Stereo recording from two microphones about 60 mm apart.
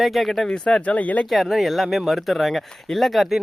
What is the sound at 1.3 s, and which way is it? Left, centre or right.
Speech, centre.